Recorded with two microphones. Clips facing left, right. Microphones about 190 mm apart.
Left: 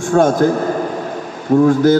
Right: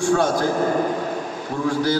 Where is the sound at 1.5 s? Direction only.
50° left (ahead or behind).